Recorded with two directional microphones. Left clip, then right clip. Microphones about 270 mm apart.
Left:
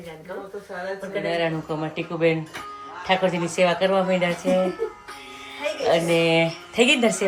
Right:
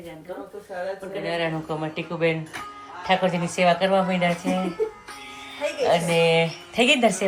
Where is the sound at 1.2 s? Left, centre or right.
Centre.